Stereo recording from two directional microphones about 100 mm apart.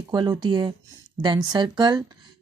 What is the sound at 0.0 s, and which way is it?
Speech, 45° right (ahead or behind).